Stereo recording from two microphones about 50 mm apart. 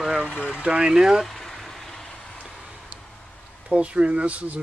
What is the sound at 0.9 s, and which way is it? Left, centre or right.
Speech, centre.